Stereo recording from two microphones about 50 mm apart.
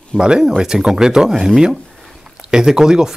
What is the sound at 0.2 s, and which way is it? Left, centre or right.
Speech, centre.